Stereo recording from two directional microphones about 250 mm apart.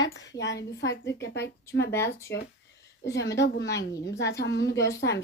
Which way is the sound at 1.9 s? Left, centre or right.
Centre.